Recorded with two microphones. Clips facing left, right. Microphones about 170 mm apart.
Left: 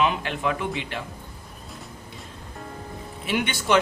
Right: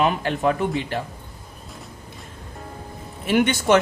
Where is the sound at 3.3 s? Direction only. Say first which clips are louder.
Right 6 dB; 45° right (ahead or behind).